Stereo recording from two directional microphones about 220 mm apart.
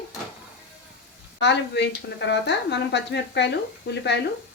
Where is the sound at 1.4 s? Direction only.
50° left (ahead or behind).